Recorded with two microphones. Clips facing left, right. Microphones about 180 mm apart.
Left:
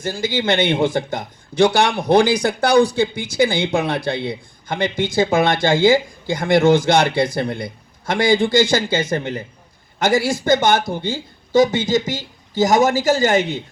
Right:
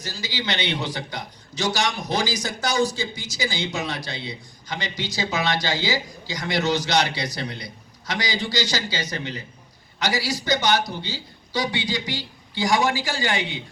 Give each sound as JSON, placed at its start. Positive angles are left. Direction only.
{"t": 0.0, "sound": "a man's voice", "side_deg": 50}